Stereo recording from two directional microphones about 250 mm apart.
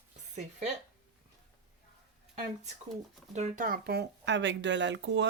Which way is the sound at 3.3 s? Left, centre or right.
Right.